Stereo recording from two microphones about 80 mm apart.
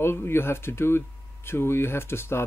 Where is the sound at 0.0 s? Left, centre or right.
Left.